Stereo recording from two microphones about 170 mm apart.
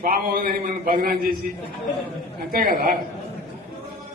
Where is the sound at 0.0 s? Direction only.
60° right (ahead or behind).